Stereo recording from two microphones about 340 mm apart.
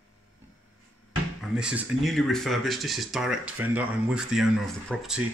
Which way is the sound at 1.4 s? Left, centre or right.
Centre.